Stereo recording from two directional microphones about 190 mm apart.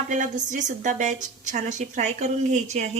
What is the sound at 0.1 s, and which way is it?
A woman's voice, 40° right (ahead or behind).